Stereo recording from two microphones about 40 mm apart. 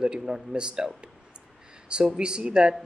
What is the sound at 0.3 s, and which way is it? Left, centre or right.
Speech, right.